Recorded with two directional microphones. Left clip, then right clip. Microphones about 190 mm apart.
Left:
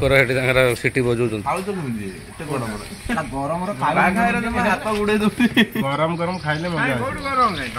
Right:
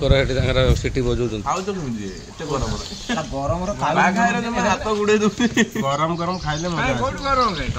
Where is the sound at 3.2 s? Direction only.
20° right (ahead or behind).